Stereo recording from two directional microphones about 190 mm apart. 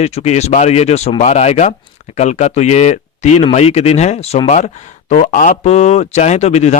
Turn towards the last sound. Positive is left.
turn(degrees=35)  # may be behind; listen again after turning